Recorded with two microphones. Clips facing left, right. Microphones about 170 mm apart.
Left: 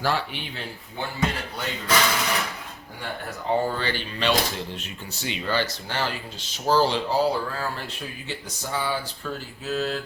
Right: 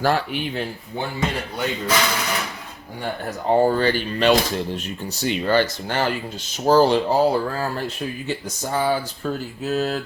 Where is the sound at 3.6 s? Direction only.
45° right (ahead or behind).